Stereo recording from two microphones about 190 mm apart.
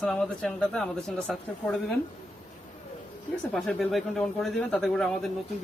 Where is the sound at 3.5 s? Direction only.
Centre (ahead or behind).